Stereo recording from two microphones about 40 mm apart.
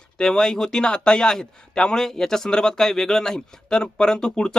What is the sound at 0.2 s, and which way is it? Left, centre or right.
Speech, centre.